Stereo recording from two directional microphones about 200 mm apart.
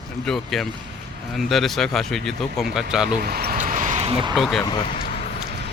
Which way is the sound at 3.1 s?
50° right (ahead or behind).